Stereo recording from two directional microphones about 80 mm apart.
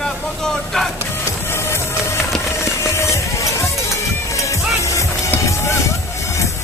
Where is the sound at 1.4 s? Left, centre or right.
Left.